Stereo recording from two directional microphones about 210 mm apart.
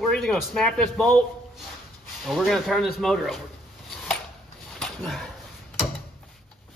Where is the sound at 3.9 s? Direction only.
Centre (ahead or behind).